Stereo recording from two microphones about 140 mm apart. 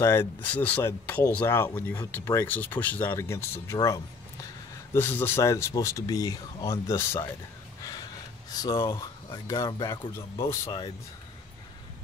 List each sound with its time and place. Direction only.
0.0 s speech: 15° left (ahead or behind)
8.5 s speech: 25° left (ahead or behind)